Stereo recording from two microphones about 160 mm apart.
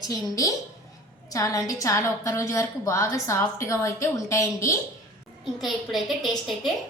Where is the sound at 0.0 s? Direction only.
25° left (ahead or behind).